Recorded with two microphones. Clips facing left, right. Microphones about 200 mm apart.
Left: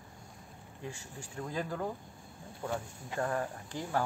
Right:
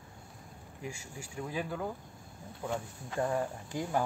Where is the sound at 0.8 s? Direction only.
10° right (ahead or behind).